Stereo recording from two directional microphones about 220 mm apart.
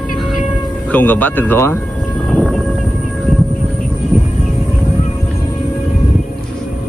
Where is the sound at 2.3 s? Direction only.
5° right (ahead or behind).